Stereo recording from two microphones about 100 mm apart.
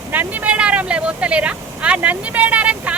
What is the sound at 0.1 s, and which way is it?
Speech, 15° right (ahead or behind).